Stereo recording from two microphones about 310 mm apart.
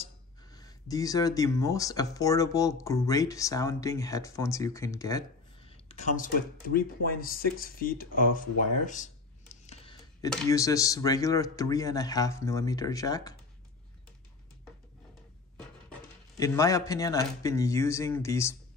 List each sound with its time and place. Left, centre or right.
0.0 s speech: centre
8.0 s a sound: left
10.3 s speech: centre
15.5 s speech: centre